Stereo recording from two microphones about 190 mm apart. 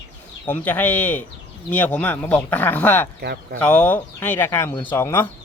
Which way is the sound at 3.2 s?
60° right (ahead or behind).